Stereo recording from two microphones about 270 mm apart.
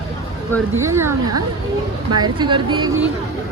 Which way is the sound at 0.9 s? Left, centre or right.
Centre.